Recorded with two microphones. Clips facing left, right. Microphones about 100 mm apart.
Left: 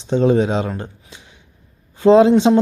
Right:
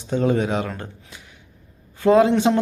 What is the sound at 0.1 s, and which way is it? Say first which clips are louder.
Speech: left 5 dB; 20° left (ahead or behind).